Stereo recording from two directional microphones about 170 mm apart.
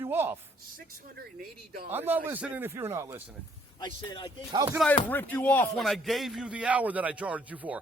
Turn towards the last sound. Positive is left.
turn(degrees=-10)  # may be behind; listen again after turning